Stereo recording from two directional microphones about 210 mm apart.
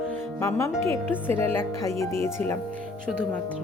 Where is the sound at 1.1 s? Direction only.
10° left (ahead or behind).